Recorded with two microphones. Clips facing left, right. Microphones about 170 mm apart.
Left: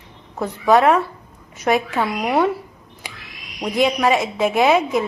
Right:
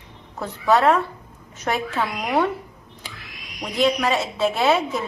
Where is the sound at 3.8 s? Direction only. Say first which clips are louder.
Left 3 dB; 15° left (ahead or behind).